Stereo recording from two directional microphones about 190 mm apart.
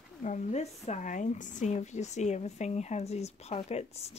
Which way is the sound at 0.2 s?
35° left (ahead or behind).